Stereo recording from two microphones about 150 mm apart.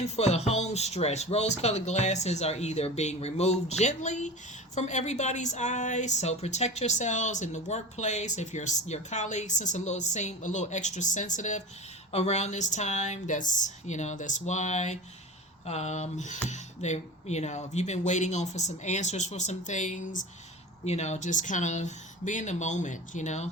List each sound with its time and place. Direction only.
0.0 s a woman's voice: 45° left (ahead or behind)